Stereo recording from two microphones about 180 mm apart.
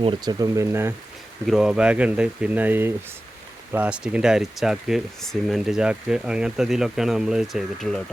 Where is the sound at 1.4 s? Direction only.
Centre (ahead or behind).